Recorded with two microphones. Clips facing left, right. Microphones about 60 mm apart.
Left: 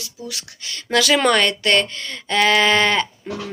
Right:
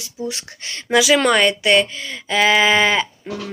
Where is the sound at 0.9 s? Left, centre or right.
Centre.